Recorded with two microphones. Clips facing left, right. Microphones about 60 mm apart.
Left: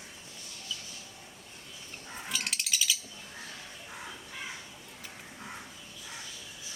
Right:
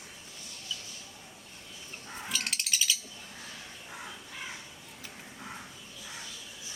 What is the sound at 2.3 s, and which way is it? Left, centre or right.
Bird, centre.